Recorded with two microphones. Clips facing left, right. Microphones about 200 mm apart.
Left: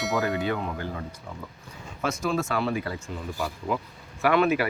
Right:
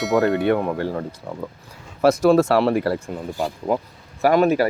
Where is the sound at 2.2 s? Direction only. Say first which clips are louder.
Right 9 dB; 70° right (ahead or behind).